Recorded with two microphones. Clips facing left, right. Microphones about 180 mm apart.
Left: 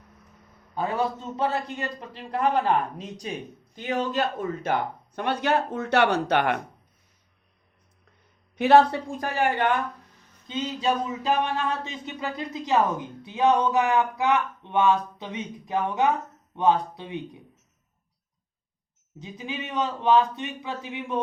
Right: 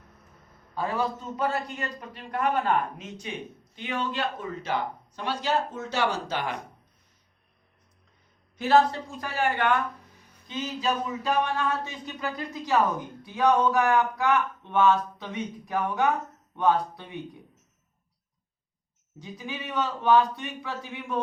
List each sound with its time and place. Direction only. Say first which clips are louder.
0.8 s speech: left 2 dB; 20° left (ahead or behind); by 6.6 s 65° left (ahead or behind)
8.5 s speech: left 4 dB; 65° left (ahead or behind)
9.4 s a woman's voice: left 1 dB; 15° left (ahead or behind)
19.2 s speech: left 2 dB; 20° left (ahead or behind)